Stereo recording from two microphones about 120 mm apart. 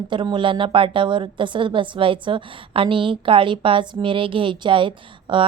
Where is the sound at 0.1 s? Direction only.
40° right (ahead or behind).